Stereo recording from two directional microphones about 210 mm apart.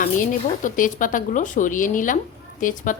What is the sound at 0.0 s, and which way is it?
A woman's voice, 40° left (ahead or behind).